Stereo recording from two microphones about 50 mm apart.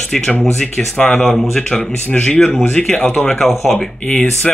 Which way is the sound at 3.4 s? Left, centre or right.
Centre.